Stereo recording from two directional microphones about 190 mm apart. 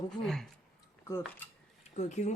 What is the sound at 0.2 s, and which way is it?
Speech, 5° left (ahead or behind).